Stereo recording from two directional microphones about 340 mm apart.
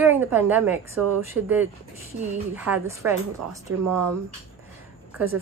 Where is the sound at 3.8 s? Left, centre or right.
Right.